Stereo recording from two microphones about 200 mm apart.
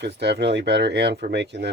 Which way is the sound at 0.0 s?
55° right (ahead or behind).